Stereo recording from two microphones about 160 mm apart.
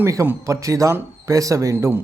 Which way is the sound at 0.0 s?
15° right (ahead or behind).